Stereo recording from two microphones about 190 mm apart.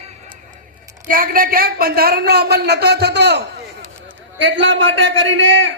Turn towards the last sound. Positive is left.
turn(degrees=-90)